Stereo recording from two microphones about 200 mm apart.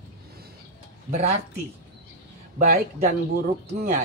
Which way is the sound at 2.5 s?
45° right (ahead or behind).